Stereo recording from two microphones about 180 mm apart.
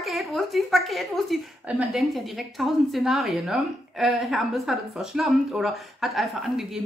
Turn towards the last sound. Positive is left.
turn(degrees=0)  # may be behind; listen again after turning